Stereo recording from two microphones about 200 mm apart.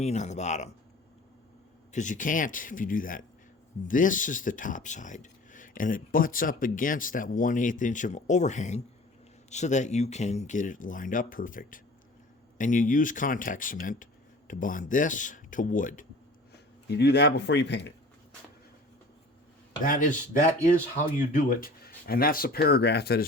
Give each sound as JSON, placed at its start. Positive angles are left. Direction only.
{"t": 0.0, "sound": "speech", "side_deg": 35}
{"t": 1.9, "sound": "speech", "side_deg": 40}
{"t": 16.9, "sound": "speech", "side_deg": 55}
{"t": 19.8, "sound": "speech", "side_deg": 40}